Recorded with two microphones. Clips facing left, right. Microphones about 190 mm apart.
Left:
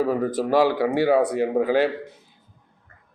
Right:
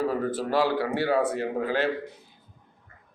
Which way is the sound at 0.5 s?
15° left (ahead or behind).